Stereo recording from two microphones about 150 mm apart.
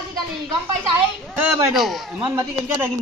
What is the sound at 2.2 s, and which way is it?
Speech, 20° right (ahead or behind).